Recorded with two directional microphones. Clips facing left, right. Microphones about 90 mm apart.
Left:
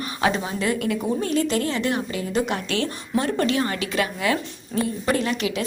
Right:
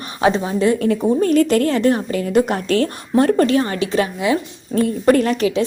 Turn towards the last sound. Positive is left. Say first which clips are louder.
# right 7 dB
turn(degrees=-40)  # may be behind; listen again after turning